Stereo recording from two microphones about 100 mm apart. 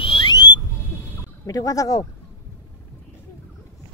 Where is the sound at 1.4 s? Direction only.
35° left (ahead or behind).